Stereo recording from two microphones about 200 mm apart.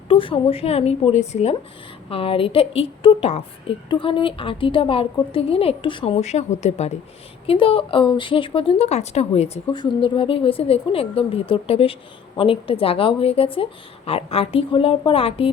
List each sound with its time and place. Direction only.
0.1 s speech: 25° left (ahead or behind)